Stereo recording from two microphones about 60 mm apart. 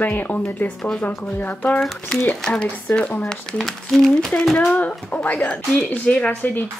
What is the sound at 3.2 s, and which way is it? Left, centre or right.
Speech, centre.